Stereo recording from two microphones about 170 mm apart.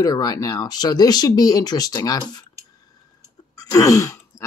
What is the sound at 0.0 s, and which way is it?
Speech, 20° left (ahead or behind).